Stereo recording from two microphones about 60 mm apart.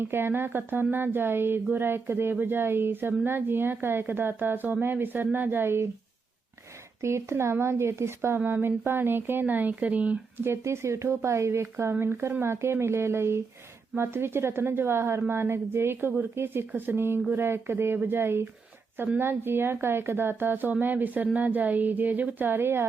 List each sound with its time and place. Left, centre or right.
0.0 s speech: right
7.0 s speech: right
10.3 s a woman's voice: right